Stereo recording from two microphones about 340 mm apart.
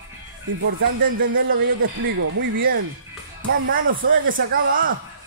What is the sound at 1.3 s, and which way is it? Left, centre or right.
Speech, right.